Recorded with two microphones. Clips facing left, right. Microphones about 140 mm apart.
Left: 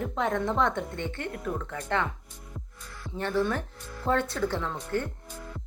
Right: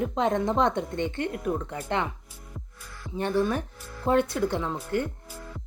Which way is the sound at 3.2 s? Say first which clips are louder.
Right 2 dB; 15° right (ahead or behind).